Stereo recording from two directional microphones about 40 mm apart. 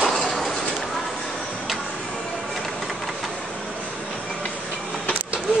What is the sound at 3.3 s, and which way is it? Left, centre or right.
Vehicle, centre.